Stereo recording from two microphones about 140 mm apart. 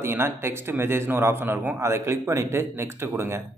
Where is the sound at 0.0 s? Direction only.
15° right (ahead or behind).